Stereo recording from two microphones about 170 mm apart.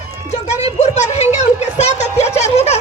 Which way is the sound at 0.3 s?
40° left (ahead or behind).